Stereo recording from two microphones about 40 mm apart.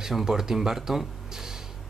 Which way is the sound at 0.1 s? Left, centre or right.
Centre.